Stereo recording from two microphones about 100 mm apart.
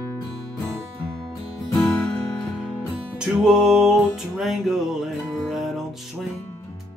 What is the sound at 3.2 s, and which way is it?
Music, 5° right (ahead or behind).